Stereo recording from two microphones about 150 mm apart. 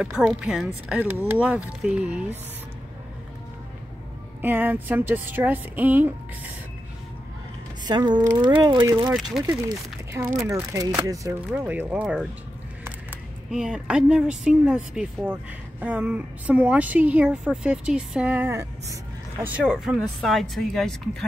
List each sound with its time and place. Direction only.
0.0 s a woman's voice: centre (ahead or behind)
4.4 s a woman's voice: 10° right (ahead or behind)
7.8 s speech: 30° right (ahead or behind)
11.5 s a woman's voice: 10° right (ahead or behind)
19.4 s speech: 5° right (ahead or behind)